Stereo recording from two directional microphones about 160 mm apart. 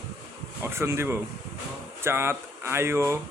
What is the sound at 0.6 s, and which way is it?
Speech, 15° right (ahead or behind).